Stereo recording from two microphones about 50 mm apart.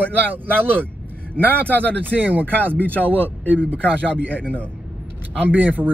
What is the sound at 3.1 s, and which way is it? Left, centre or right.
Speech, right.